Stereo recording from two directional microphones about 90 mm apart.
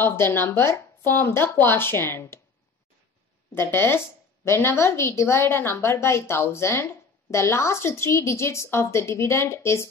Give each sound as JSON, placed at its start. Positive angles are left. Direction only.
{"t": 0.0, "sound": "a woman's voice", "side_deg": 25}
{"t": 3.5, "sound": "a woman's voice", "side_deg": 25}